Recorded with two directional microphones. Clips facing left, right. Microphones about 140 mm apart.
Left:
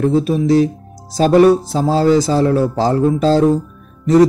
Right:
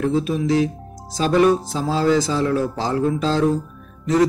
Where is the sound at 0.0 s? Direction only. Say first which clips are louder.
Left 5 dB; 35° left (ahead or behind).